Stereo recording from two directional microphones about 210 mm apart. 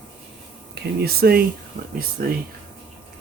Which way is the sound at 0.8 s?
50° right (ahead or behind).